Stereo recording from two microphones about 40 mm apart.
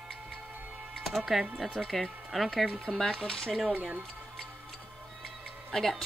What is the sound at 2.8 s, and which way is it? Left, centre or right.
Speech, centre.